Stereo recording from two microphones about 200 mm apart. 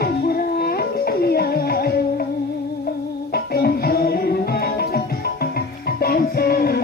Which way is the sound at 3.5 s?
50° left (ahead or behind).